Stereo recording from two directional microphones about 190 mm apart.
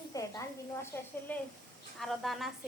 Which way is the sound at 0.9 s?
10° left (ahead or behind).